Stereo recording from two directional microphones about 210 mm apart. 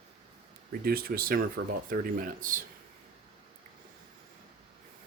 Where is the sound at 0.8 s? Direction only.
45° right (ahead or behind).